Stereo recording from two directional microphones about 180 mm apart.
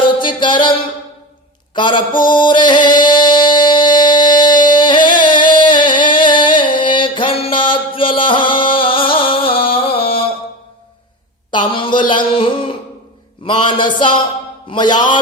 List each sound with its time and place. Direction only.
0.2 s music: 25° left (ahead or behind)
1.7 s mantra: 25° left (ahead or behind)
5.2 s music: 25° left (ahead or behind)
6.6 s mantra: 25° left (ahead or behind)
11.5 s a sound: 25° left (ahead or behind)
13.4 s speech: 30° left (ahead or behind)